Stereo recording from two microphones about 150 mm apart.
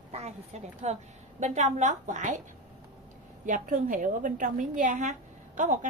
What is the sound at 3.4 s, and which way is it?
A woman's voice, 60° right (ahead or behind).